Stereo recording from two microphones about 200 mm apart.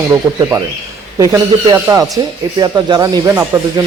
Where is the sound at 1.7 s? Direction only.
20° right (ahead or behind).